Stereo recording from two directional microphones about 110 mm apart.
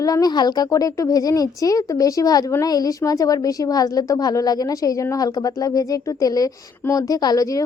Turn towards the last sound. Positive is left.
turn(degrees=30)  # may be behind; listen again after turning